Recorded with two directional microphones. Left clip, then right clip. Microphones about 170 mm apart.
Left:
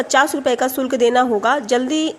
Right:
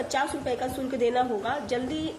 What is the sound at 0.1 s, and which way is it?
A woman's voice, 35° left (ahead or behind).